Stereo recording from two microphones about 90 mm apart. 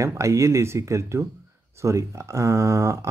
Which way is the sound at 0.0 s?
35° right (ahead or behind).